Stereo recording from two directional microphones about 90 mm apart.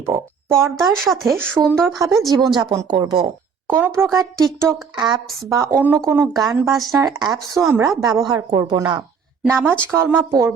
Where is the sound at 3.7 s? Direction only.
25° right (ahead or behind).